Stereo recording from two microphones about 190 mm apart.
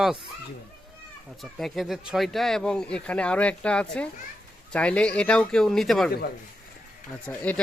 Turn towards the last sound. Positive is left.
turn(degrees=5)  # may be behind; listen again after turning